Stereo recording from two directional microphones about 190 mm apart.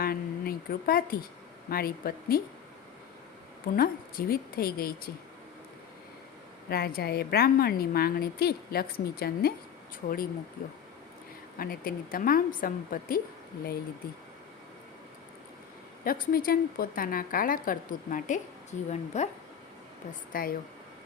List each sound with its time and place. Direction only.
0.0 s a sound: 50° left (ahead or behind)
1.7 s a woman's voice: 50° left (ahead or behind)
3.8 s a woman's voice: 50° left (ahead or behind)
6.7 s a woman's voice: 55° left (ahead or behind)
11.6 s a woman's voice: 50° left (ahead or behind)
16.0 s a woman's voice: 50° left (ahead or behind)
20.3 s a woman's voice: 50° left (ahead or behind)